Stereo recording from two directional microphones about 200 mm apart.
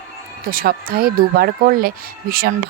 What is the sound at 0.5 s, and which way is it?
A woman's voice, 50° right (ahead or behind).